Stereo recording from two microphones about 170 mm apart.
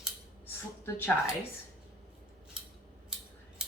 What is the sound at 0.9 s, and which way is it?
Speech, 15° left (ahead or behind).